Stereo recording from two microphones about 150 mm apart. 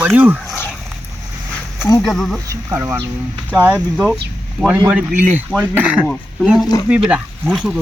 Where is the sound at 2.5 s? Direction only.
20° right (ahead or behind).